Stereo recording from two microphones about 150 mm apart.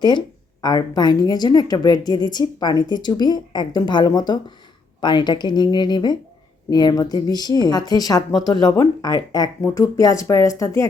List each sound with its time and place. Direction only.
0.6 s a woman's voice: 25° left (ahead or behind)